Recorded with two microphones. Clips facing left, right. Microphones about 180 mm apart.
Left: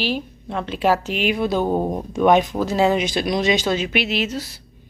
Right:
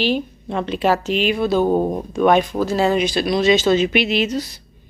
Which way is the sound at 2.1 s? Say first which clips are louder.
Even; 20° left (ahead or behind).